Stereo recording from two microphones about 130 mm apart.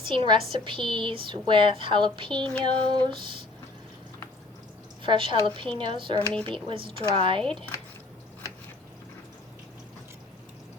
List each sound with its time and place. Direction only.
0.0 s a woman's voice: 40° right (ahead or behind)
5.0 s a woman's voice: 40° right (ahead or behind)
7.4 s speech: 5° left (ahead or behind)